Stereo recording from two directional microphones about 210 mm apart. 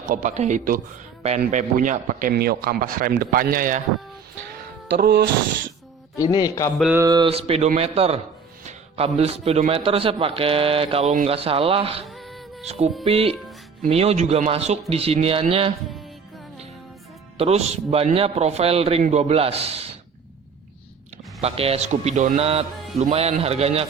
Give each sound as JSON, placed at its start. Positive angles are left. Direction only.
{"t": 0.1, "sound": "speech", "side_deg": -35}
{"t": 6.1, "sound": "a man's voice", "side_deg": 20}
{"t": 6.9, "sound": "a man's voice", "side_deg": -15}
{"t": 12.0, "sound": "a sound", "side_deg": 0}
{"t": 12.6, "sound": "a man's voice", "side_deg": -30}
{"t": 17.3, "sound": "a man's voice", "side_deg": -30}
{"t": 21.4, "sound": "a man's voice", "side_deg": -30}